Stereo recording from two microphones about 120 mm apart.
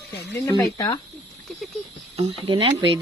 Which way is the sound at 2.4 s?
40° right (ahead or behind).